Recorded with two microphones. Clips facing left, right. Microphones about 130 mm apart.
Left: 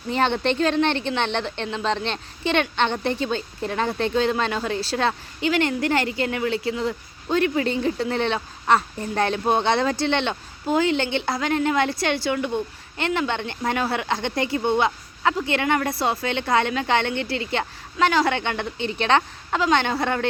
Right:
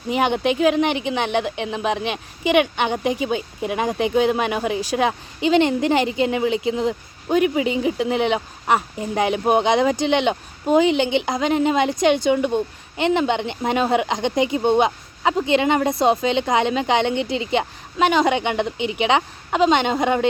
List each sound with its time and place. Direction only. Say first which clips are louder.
0.1 s a woman's voice: right 2 dB; 15° right (ahead or behind)